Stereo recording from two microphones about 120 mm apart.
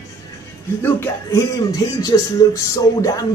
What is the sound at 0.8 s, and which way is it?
Speech, 20° left (ahead or behind).